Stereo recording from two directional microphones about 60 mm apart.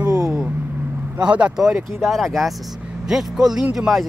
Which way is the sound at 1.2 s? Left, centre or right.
Right.